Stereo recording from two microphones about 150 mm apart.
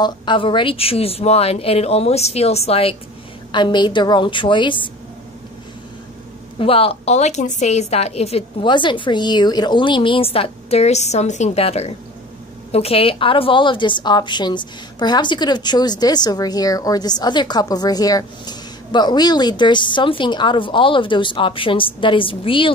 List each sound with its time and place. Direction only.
0.0 s a woman's voice: 30° left (ahead or behind)
3.5 s a woman's voice: 30° left (ahead or behind)
6.6 s a woman's voice: 40° left (ahead or behind)